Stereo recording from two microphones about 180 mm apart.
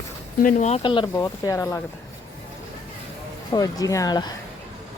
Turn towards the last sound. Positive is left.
turn(degrees=20)  # may be behind; listen again after turning